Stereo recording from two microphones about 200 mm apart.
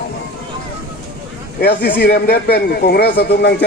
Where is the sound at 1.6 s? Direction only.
55° left (ahead or behind).